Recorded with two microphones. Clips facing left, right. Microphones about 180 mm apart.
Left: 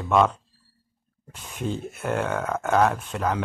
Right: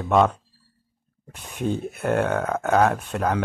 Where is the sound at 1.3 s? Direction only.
60° right (ahead or behind).